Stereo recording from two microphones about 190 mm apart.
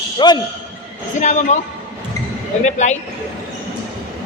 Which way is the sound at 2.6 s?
40° left (ahead or behind).